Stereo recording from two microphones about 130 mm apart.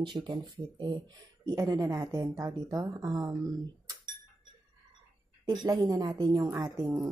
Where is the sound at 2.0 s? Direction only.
40° right (ahead or behind).